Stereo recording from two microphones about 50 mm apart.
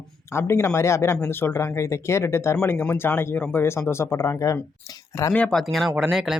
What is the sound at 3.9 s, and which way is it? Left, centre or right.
Speech, left.